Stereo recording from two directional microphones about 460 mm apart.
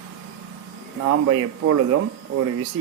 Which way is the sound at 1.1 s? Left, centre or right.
Right.